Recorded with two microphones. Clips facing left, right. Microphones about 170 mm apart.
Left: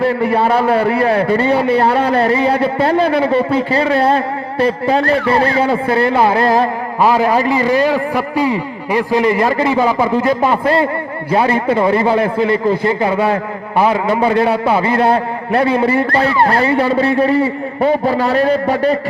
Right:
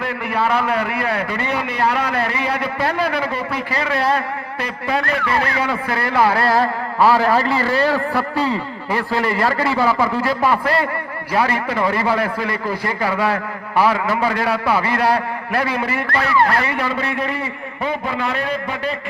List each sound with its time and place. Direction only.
0.0 s a man's voice: 30° left (ahead or behind)